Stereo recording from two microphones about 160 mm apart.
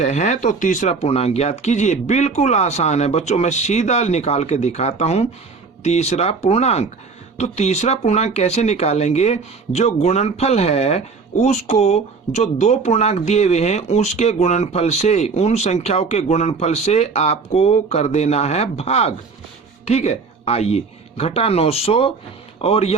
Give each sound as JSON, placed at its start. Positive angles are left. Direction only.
{"t": 0.0, "sound": "a man's voice", "side_deg": 50}